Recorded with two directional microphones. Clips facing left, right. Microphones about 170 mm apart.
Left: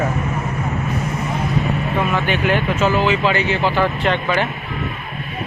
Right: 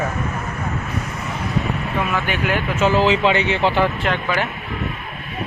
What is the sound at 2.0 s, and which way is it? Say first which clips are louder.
Speech: left 3 dB; 5° right (ahead or behind).